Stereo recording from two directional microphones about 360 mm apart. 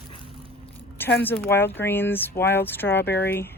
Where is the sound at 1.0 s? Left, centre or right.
Centre.